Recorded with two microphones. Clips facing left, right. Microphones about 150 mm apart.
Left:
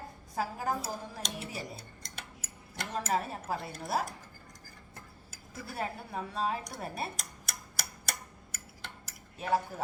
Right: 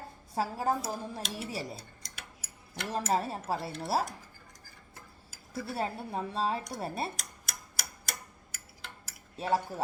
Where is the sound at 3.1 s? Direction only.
30° right (ahead or behind).